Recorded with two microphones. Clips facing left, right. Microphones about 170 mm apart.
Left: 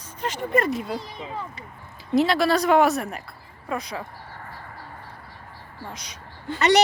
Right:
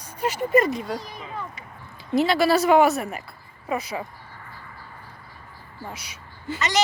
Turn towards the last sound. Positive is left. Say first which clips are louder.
# even
turn(degrees=-5)  # may be behind; listen again after turning